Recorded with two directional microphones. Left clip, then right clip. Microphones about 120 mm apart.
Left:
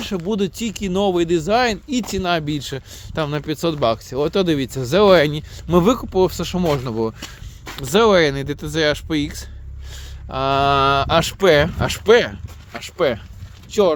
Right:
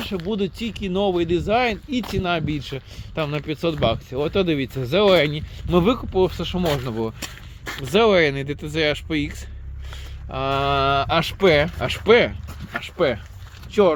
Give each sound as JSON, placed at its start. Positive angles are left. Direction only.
{"t": 0.3, "sound": "speech", "side_deg": 65}
{"t": 7.8, "sound": "speech", "side_deg": 50}
{"t": 12.7, "sound": "speech", "side_deg": 50}
{"t": 13.7, "sound": "speech", "side_deg": 65}